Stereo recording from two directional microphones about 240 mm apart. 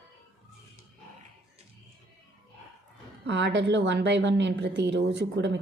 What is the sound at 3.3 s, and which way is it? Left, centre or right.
A woman's voice, right.